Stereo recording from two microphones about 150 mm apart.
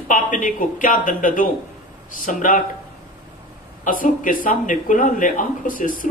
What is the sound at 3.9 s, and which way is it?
Speech, 65° left (ahead or behind).